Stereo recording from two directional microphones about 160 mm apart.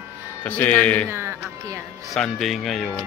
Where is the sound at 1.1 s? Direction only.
15° right (ahead or behind).